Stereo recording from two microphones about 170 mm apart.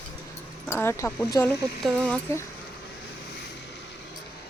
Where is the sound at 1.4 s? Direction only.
Centre (ahead or behind).